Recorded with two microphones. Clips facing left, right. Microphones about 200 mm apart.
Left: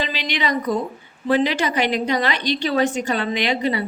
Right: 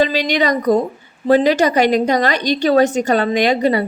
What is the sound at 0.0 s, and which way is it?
A woman's voice, 40° right (ahead or behind).